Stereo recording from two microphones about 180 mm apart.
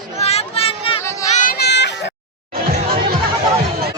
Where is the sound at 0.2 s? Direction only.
35° left (ahead or behind).